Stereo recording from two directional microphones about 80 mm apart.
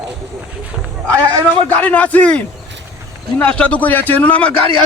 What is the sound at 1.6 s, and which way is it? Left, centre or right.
A man's voice, centre.